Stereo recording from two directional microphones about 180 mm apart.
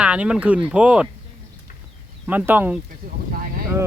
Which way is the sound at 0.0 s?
5° right (ahead or behind).